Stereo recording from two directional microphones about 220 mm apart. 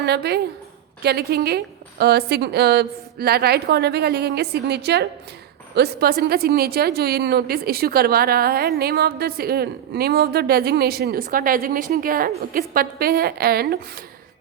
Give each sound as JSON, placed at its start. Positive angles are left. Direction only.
{"t": 0.0, "sound": "speech", "side_deg": -50}